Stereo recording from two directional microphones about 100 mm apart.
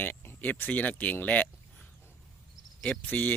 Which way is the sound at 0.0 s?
20° left (ahead or behind).